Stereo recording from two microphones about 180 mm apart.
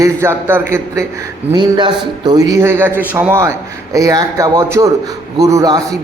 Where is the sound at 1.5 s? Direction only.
25° right (ahead or behind).